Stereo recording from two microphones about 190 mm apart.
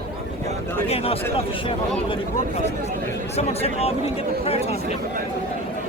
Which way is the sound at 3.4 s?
35° left (ahead or behind).